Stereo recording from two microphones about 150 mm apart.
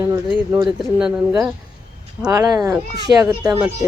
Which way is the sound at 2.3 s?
20° right (ahead or behind).